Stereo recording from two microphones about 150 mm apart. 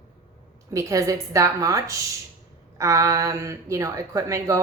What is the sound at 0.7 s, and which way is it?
A woman's voice, 20° right (ahead or behind).